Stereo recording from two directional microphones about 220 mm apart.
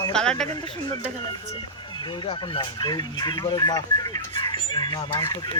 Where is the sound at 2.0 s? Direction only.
20° left (ahead or behind).